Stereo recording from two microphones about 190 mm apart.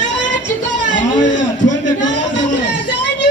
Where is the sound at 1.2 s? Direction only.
75° left (ahead or behind).